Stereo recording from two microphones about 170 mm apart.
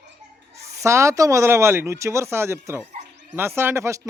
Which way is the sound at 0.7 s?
15° right (ahead or behind).